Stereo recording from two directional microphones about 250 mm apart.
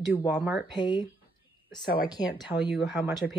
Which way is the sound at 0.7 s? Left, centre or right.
Centre.